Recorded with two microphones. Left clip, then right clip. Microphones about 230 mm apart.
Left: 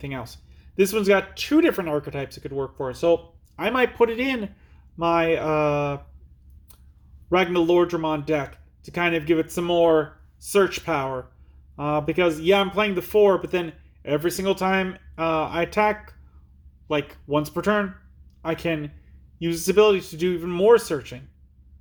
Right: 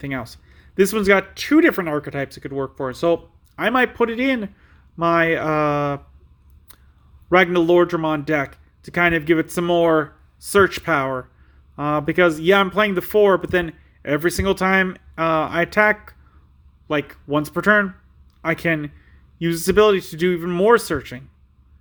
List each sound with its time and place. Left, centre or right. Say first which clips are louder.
0.0 s speech: right 5 dB; right
7.3 s speech: right 5 dB; right